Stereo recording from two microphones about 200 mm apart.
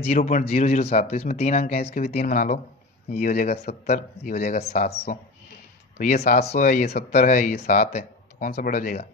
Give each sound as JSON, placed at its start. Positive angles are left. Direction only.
{"t": 0.0, "sound": "speech", "side_deg": 35}
{"t": 7.2, "sound": "speech", "side_deg": 40}